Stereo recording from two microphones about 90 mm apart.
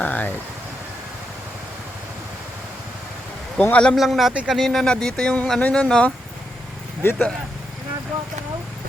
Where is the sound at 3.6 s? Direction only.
15° left (ahead or behind).